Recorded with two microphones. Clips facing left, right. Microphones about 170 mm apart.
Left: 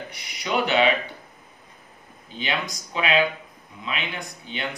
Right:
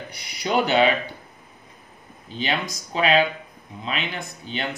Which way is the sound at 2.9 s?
35° right (ahead or behind).